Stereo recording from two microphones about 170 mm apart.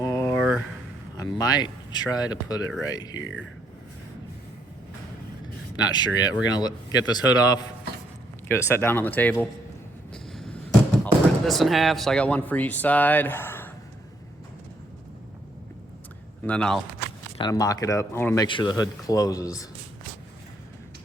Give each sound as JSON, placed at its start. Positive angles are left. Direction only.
{"t": 0.0, "sound": "a sound", "side_deg": 20}
{"t": 0.3, "sound": "a sound", "side_deg": -5}
{"t": 1.1, "sound": "speech", "side_deg": 20}
{"t": 5.7, "sound": "speech", "side_deg": 25}
{"t": 10.1, "sound": "a sound", "side_deg": 5}
{"t": 11.0, "sound": "speech", "side_deg": 0}
{"t": 16.5, "sound": "speech", "side_deg": 5}
{"t": 17.3, "sound": "speech", "side_deg": 25}
{"t": 18.4, "sound": "speech", "side_deg": 30}